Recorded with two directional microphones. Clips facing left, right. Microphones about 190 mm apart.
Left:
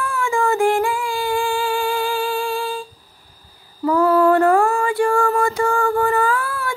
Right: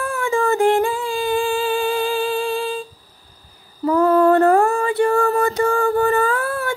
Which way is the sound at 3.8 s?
35° right (ahead or behind).